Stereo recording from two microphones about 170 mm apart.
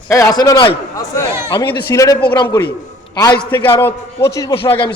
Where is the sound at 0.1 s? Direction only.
20° left (ahead or behind).